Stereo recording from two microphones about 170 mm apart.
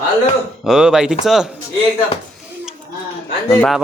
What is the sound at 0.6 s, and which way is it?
Speech, 5° right (ahead or behind).